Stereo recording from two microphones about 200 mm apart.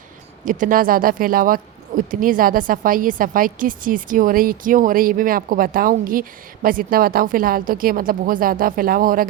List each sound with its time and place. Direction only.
0.4 s a woman's voice: 40° right (ahead or behind)